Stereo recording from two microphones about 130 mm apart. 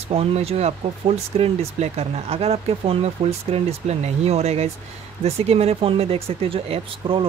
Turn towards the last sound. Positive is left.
turn(degrees=-45)  # may be behind; listen again after turning